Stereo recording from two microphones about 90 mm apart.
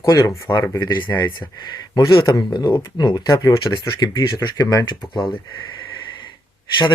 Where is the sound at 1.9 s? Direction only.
55° left (ahead or behind).